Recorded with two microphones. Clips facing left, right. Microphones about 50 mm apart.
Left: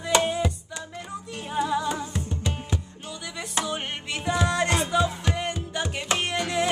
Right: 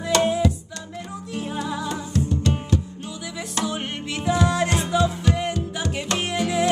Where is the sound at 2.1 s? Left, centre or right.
Centre.